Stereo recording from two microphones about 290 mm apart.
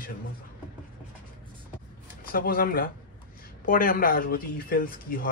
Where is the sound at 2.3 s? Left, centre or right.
Left.